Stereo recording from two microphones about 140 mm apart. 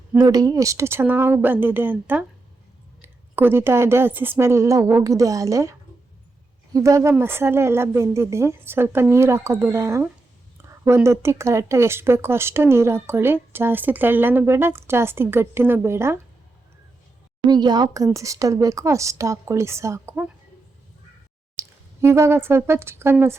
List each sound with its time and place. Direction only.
0.2 s speech: 25° right (ahead or behind)
6.7 s speech: 20° right (ahead or behind)
17.5 s speech: 30° right (ahead or behind)
21.5 s speech: 20° right (ahead or behind)